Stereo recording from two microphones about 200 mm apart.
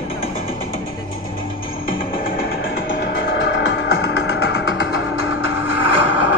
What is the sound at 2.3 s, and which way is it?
Music, 50° left (ahead or behind).